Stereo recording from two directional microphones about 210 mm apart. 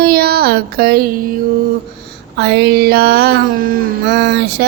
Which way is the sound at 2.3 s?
55° right (ahead or behind).